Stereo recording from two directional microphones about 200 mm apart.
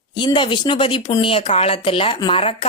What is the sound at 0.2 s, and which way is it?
Speech, 25° left (ahead or behind).